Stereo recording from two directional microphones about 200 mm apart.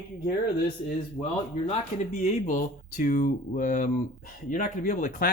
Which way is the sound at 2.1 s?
35° left (ahead or behind).